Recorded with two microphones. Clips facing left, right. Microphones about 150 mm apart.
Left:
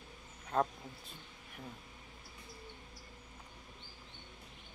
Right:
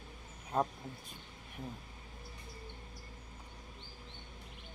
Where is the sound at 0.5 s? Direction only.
15° right (ahead or behind).